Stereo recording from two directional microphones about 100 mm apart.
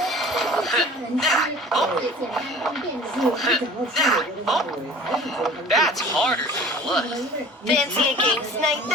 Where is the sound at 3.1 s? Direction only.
Centre (ahead or behind).